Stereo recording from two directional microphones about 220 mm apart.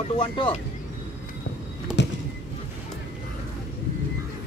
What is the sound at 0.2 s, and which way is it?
Speech, 25° left (ahead or behind).